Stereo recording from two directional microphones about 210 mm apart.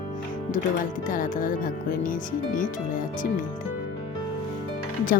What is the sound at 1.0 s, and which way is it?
Speech, 40° left (ahead or behind).